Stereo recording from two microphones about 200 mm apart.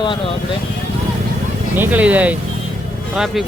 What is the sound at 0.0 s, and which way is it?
Speech, 25° left (ahead or behind).